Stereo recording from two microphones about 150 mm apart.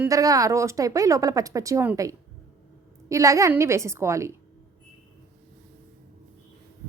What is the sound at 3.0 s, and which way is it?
A woman's voice, 20° right (ahead or behind).